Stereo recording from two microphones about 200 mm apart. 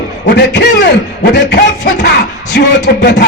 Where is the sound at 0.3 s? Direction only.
60° left (ahead or behind).